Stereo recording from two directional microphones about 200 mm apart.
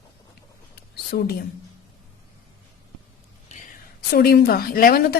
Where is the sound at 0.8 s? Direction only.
55° left (ahead or behind).